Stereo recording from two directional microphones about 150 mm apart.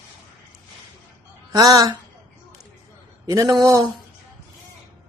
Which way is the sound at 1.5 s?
25° right (ahead or behind).